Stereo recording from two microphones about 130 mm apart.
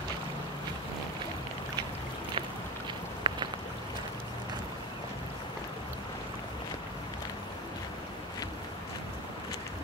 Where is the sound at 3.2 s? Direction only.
35° right (ahead or behind).